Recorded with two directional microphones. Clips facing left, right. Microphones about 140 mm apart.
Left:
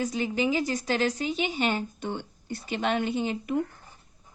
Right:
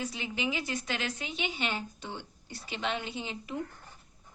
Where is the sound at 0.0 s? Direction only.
40° left (ahead or behind).